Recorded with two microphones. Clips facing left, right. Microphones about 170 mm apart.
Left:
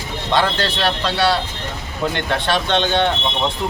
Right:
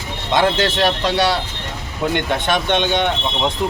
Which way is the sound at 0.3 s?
20° right (ahead or behind).